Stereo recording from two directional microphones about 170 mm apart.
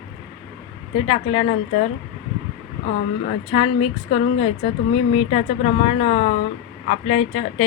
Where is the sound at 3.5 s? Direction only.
30° left (ahead or behind).